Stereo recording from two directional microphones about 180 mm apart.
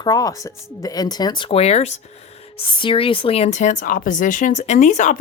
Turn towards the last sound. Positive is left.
turn(degrees=45)  # may be behind; listen again after turning